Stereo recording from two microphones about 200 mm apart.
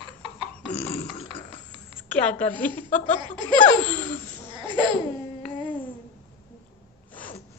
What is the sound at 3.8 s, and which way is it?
Laughter, 10° left (ahead or behind).